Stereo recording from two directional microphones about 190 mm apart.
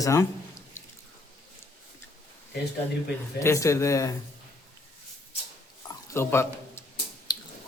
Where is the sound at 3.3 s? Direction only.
15° left (ahead or behind).